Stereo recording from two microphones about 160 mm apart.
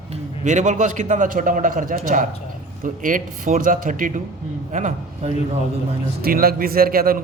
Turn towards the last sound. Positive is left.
turn(degrees=-65)  # may be behind; listen again after turning